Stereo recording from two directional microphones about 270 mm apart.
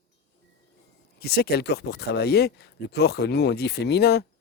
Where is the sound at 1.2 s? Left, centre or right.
Left.